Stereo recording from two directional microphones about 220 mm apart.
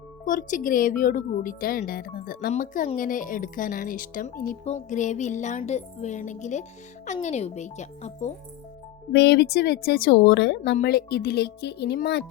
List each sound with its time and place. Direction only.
0.3 s speech: 35° left (ahead or behind)
9.1 s a woman's voice: 50° left (ahead or behind)